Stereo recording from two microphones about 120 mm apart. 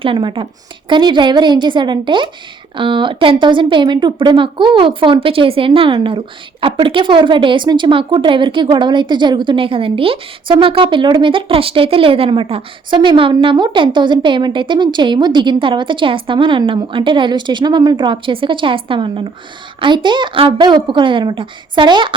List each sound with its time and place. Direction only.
0.0 s a woman's voice: 45° right (ahead or behind)